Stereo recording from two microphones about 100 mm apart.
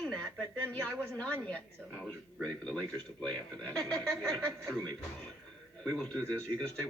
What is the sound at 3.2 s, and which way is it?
Speech, 10° left (ahead or behind).